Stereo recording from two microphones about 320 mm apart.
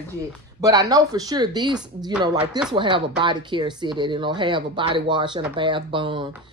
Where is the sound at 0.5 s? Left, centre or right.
Centre.